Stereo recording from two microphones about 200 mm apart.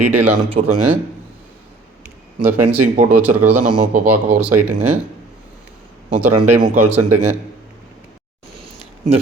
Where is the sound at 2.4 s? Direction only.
10° right (ahead or behind).